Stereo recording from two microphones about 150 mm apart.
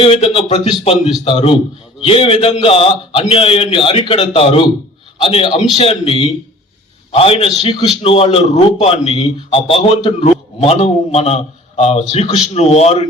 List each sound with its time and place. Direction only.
0.0 s a man's voice: 40° left (ahead or behind)